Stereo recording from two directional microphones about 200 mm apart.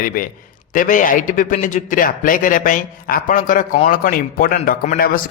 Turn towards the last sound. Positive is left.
turn(degrees=40)  # may be behind; listen again after turning